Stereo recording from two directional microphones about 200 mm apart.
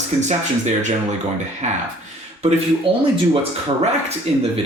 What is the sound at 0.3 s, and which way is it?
Speech, 35° right (ahead or behind).